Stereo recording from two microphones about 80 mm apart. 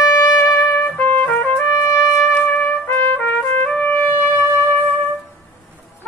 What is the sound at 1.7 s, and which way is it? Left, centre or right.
Trumpet, left.